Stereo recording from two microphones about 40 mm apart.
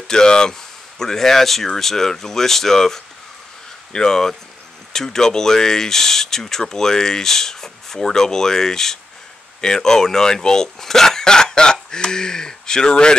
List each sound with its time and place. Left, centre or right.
0.1 s speech: centre